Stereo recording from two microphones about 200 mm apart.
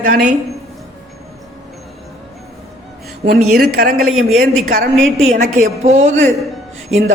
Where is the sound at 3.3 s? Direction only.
50° right (ahead or behind).